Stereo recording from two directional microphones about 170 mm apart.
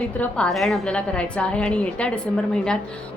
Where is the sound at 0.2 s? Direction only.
5° left (ahead or behind).